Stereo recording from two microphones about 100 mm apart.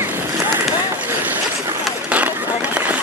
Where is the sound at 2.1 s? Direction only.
15° right (ahead or behind).